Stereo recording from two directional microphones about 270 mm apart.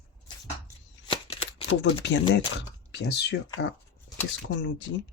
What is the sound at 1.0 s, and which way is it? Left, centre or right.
Shuffling cards, centre.